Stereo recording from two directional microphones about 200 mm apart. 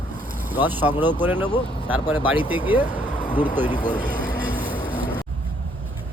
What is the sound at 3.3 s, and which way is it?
Speech, 10° right (ahead or behind).